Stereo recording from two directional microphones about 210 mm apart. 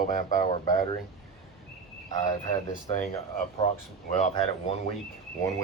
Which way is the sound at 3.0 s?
35° left (ahead or behind).